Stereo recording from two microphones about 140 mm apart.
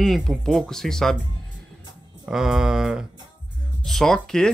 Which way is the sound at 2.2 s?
5° right (ahead or behind).